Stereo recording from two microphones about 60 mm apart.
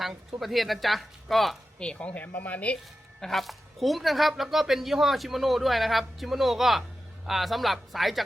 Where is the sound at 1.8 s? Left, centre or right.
Centre.